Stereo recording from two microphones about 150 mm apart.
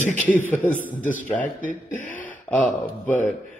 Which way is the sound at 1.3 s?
10° left (ahead or behind).